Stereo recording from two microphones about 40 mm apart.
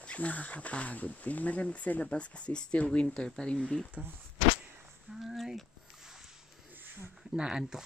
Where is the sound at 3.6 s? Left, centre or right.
Centre.